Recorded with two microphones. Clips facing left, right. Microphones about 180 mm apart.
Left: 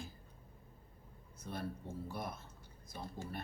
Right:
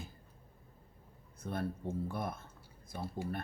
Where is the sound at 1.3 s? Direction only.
55° right (ahead or behind).